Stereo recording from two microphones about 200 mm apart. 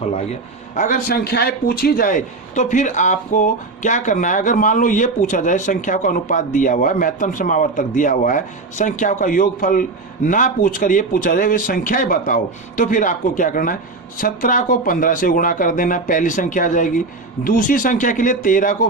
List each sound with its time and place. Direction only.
0.8 s a man's voice: 40° left (ahead or behind)